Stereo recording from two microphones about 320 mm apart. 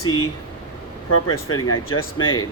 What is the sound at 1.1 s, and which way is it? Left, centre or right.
Speech, left.